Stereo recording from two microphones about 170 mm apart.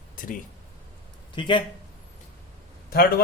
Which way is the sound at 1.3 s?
30° left (ahead or behind).